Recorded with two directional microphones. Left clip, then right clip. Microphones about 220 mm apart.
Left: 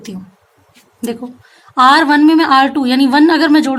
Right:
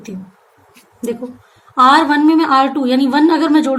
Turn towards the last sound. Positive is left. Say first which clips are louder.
# left 2 dB
turn(degrees=40)  # may be behind; listen again after turning